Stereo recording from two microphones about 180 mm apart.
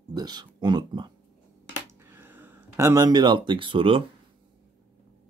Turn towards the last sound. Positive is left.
turn(degrees=-30)  # may be behind; listen again after turning